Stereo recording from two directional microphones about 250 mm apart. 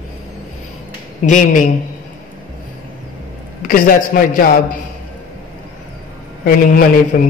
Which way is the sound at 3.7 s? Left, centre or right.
Left.